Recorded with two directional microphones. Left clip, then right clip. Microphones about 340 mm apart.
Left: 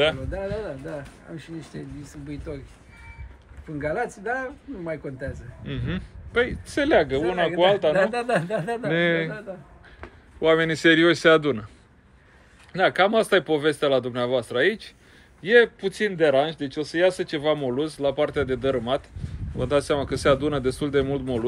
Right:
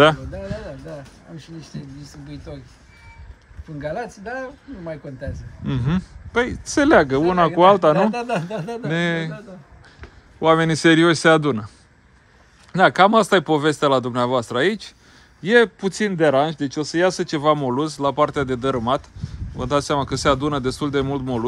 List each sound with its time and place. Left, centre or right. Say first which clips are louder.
0.0 s music: right 7 dB; right
3.8 s a man's voice: left 1 dB; centre
10.4 s speech: right 3 dB; centre
12.7 s a man's voice: right 6 dB; centre